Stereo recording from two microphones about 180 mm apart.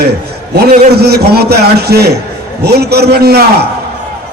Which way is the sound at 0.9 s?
60° right (ahead or behind).